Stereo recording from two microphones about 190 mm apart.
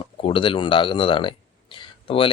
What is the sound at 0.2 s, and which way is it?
Speech, 30° left (ahead or behind).